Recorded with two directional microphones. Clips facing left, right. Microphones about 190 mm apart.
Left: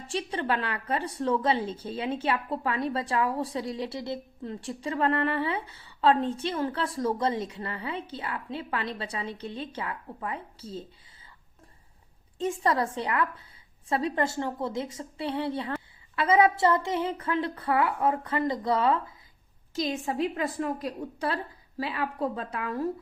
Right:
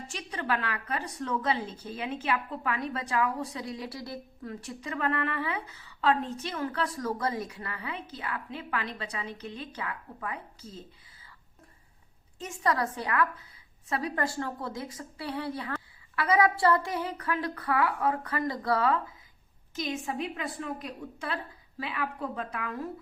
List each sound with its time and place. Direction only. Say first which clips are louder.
0.1 s a woman's voice: left 4 dB; 30° left (ahead or behind)
12.4 s a woman's voice: left 3 dB; 30° left (ahead or behind)
19.7 s speech: left 4 dB; 35° left (ahead or behind)